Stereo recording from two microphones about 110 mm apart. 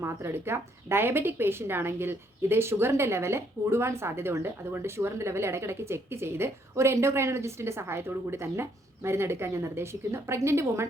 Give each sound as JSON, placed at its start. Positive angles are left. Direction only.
{"t": 0.0, "sound": "speech", "side_deg": -25}